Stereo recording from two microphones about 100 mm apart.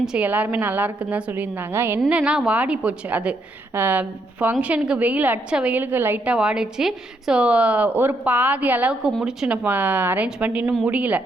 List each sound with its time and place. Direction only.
0.0 s a woman's voice: 5° right (ahead or behind)
0.3 s a woman's voice: 20° right (ahead or behind)
2.0 s a woman's voice: 10° right (ahead or behind)
9.6 s a woman's voice: 20° right (ahead or behind)